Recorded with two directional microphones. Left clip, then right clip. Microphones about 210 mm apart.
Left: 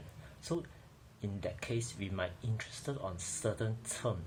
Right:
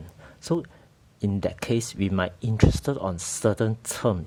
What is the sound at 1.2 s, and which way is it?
Speech, 50° right (ahead or behind).